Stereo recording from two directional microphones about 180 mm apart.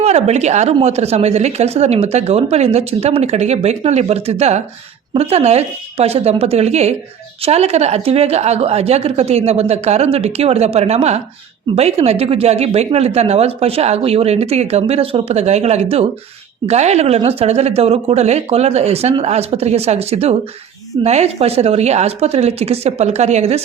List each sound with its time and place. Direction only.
0.0 s speech: 35° right (ahead or behind)